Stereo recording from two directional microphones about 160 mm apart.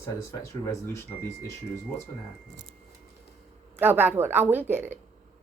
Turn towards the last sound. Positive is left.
turn(degrees=-15)  # may be behind; listen again after turning